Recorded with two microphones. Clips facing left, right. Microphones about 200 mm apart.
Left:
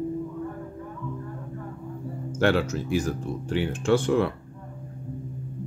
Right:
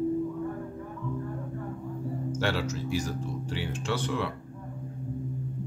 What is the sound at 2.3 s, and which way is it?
Speech, 55° left (ahead or behind).